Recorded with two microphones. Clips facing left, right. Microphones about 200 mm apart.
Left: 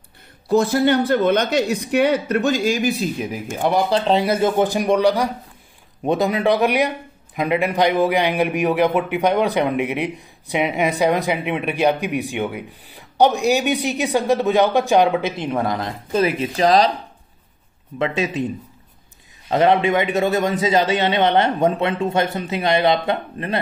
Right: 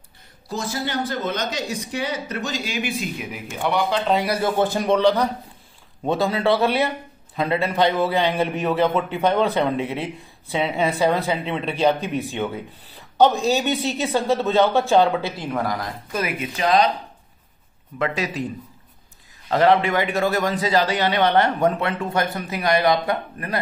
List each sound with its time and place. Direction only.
0.5 s a man's voice: 60° left (ahead or behind); by 16.9 s 35° left (ahead or behind)
17.9 s a man's voice: 25° left (ahead or behind)
19.5 s a man's voice: 20° left (ahead or behind)